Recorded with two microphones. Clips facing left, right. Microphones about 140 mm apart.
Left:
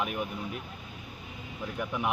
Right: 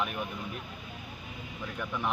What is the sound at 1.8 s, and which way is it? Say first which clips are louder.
Speech: left 2 dB; 15° left (ahead or behind).